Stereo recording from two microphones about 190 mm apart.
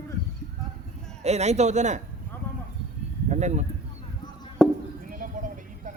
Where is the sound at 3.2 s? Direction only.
40° right (ahead or behind).